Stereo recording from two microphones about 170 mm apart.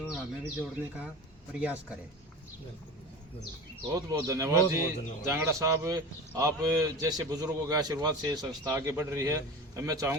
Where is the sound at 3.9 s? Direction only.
20° right (ahead or behind).